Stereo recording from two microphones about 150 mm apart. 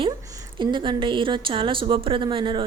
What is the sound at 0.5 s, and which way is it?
A woman's voice, 30° right (ahead or behind).